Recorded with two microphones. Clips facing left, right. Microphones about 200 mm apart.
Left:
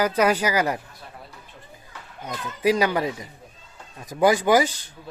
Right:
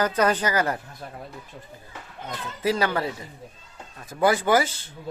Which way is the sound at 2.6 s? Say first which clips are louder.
Left 3 dB; 15° left (ahead or behind).